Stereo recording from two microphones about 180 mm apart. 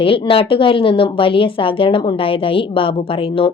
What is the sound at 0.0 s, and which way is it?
A woman's voice, 30° left (ahead or behind).